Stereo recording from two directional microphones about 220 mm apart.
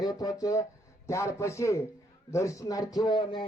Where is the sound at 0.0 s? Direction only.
15° left (ahead or behind).